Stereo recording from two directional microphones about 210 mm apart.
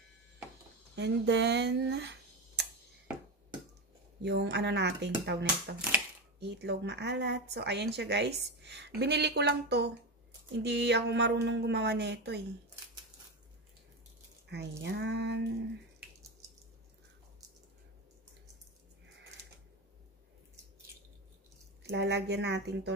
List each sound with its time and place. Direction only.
0.9 s speech: 55° right (ahead or behind)
4.2 s speech: 55° right (ahead or behind)
14.8 s speech: 55° right (ahead or behind)
21.8 s speech: 55° right (ahead or behind)